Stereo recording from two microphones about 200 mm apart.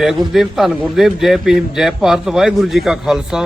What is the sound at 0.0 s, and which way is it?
A man's voice, centre (ahead or behind).